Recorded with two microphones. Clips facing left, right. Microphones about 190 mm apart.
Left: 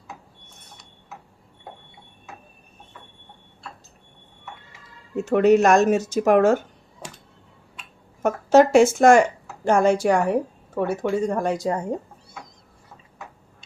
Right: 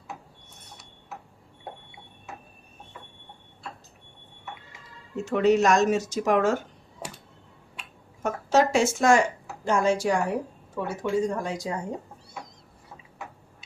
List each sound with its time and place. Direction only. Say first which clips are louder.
5.2 s speech: left 5 dB; 55° left (ahead or behind)
8.2 s speech: left 7 dB; 55° left (ahead or behind)